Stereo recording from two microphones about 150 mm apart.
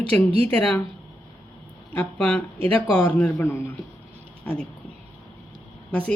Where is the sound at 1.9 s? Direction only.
10° left (ahead or behind).